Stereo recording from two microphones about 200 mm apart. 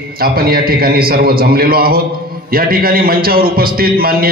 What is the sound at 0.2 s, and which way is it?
A man's voice, 50° right (ahead or behind).